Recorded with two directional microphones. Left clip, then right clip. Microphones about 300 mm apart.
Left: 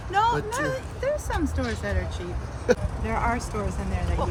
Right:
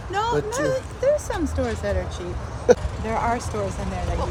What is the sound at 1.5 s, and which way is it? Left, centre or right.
Speech, centre.